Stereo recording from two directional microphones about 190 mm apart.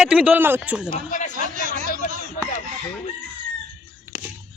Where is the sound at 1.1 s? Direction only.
40° left (ahead or behind).